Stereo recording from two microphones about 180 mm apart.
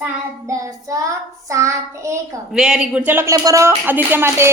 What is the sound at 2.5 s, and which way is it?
Speech, 5° right (ahead or behind).